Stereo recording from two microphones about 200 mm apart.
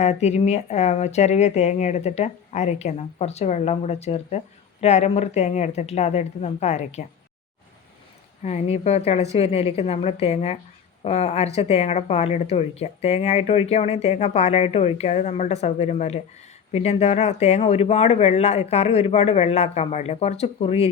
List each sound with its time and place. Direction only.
0.0 s a woman's voice: 35° left (ahead or behind)
8.4 s a woman's voice: 35° left (ahead or behind)